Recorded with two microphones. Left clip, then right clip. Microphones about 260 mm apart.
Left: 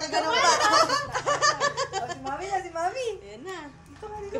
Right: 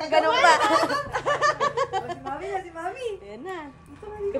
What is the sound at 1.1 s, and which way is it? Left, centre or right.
Laughter, right.